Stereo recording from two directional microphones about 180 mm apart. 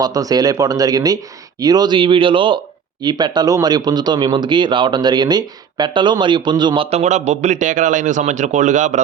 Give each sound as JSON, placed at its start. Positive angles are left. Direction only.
{"t": 0.0, "sound": "speech", "side_deg": -20}